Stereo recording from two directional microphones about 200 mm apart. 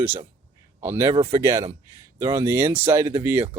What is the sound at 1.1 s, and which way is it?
Speech, 25° right (ahead or behind).